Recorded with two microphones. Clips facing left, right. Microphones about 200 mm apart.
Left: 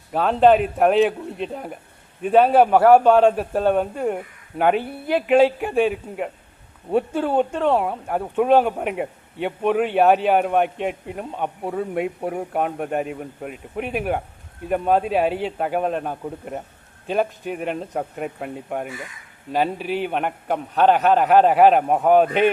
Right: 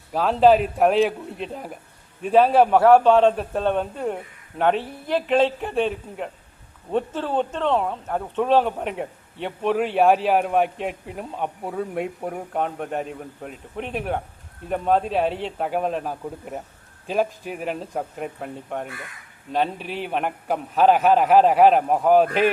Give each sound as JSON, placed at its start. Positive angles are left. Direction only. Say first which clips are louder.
{"t": 0.1, "sound": "a man's voice", "louder": "left 1 dB", "side_deg": 0}